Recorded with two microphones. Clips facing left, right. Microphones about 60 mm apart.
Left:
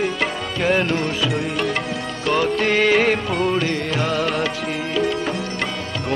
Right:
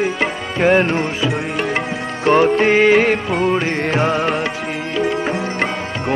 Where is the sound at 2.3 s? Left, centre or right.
Right.